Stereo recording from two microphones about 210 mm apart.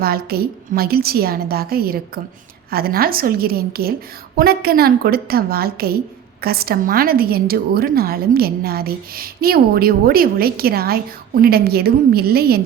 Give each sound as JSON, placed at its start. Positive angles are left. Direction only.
{"t": 0.0, "sound": "a woman's voice", "side_deg": -45}